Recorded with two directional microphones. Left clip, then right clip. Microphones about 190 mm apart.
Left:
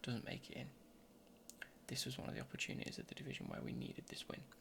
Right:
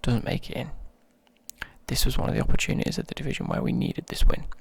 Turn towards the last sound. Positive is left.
turn(degrees=-40)  # may be behind; listen again after turning